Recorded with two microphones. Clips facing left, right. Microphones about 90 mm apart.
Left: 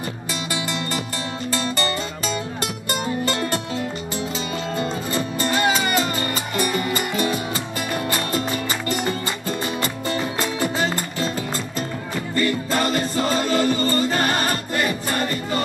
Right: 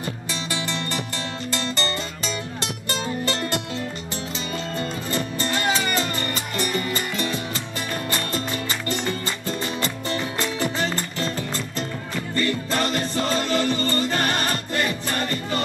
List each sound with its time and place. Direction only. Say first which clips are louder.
0.3 s music: left 3 dB; 15° left (ahead or behind)
2.6 s music: left 3 dB; 15° left (ahead or behind)
4.7 s music: left 3 dB; 15° left (ahead or behind)